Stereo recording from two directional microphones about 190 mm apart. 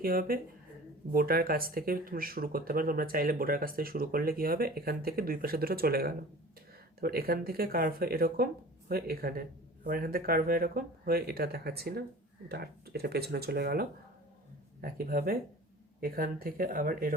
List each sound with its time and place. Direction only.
0.0 s speech: 50° right (ahead or behind)